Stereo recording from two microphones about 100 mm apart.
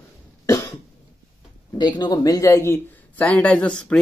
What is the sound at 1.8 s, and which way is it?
Speech, 45° left (ahead or behind).